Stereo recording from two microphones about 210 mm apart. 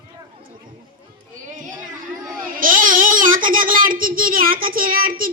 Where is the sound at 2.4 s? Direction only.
40° right (ahead or behind).